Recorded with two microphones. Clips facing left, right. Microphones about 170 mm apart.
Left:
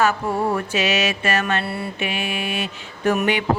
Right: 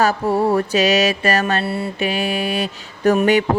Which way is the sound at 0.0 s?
35° right (ahead or behind).